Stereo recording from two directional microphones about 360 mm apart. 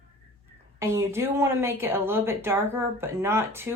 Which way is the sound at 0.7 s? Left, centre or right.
Centre.